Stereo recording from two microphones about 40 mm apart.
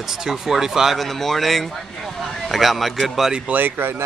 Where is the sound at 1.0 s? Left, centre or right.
Centre.